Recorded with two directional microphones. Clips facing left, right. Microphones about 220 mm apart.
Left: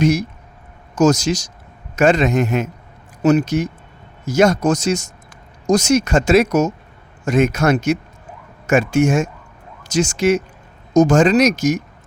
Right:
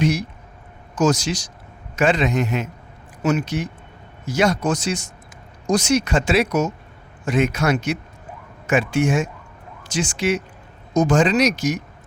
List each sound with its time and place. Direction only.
0.0 s speech: 45° left (ahead or behind)